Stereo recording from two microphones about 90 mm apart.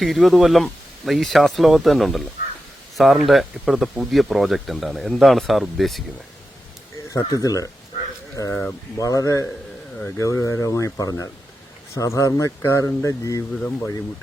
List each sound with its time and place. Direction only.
0.0 s speech: centre (ahead or behind)
7.1 s speech: 40° left (ahead or behind)